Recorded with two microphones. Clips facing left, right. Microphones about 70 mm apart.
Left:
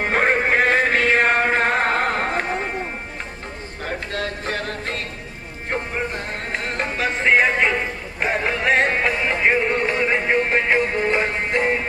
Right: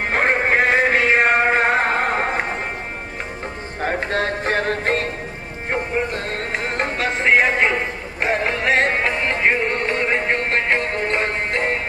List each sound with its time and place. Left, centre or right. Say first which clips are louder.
0.0 s music: even; centre
1.9 s carnatic music: right 1 dB; centre
3.8 s music: right 6 dB; right
6.9 s music: even; centre